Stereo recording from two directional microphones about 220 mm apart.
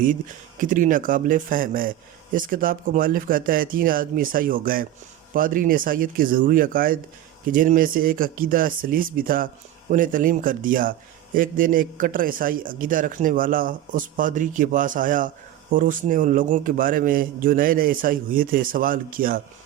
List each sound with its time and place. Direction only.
0.6 s a man's voice: 35° right (ahead or behind)